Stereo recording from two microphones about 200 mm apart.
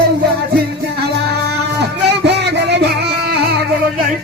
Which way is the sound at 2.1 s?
60° right (ahead or behind).